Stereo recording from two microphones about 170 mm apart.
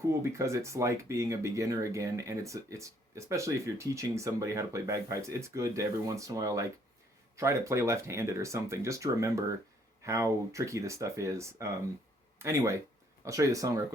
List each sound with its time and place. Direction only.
0.1 s speech: 15° right (ahead or behind)